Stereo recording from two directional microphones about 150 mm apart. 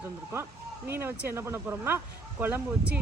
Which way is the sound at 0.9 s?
15° right (ahead or behind).